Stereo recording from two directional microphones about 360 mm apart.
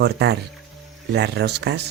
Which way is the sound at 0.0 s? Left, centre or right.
Right.